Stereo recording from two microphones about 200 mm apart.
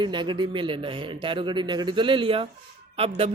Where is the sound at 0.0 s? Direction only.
20° right (ahead or behind).